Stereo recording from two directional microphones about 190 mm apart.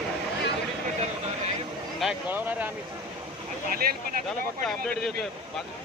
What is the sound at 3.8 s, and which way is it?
Speech, 55° right (ahead or behind).